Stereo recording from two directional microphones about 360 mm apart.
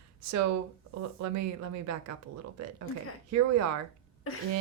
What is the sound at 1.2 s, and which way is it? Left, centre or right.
Speech, right.